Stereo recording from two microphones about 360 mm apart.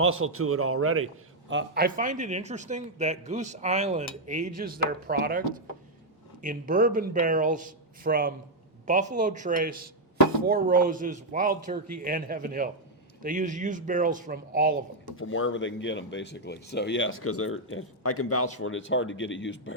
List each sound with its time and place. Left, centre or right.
0.0 s a man's voice: right
6.4 s a man's voice: right
15.1 s speech: left